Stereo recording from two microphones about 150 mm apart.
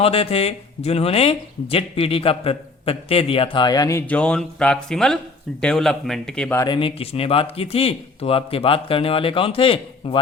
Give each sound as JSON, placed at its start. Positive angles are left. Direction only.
{"t": 0.0, "sound": "speech", "side_deg": 40}
{"t": 4.0, "sound": "speech", "side_deg": 10}
{"t": 6.6, "sound": "speech", "side_deg": 35}